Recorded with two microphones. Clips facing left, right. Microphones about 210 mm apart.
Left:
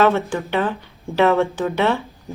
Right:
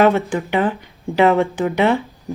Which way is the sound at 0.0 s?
15° right (ahead or behind).